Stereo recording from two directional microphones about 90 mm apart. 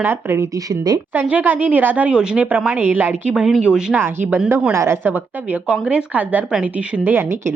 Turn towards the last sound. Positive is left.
turn(degrees=-25)  # may be behind; listen again after turning